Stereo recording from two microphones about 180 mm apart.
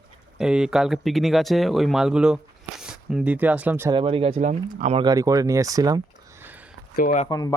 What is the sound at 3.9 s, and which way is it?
Speech, 30° right (ahead or behind).